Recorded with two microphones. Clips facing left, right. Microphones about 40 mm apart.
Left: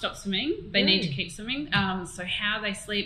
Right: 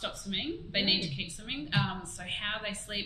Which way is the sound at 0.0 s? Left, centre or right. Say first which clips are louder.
Left 6 dB; left.